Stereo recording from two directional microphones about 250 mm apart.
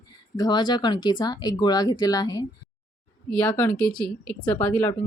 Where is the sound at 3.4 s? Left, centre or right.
Centre.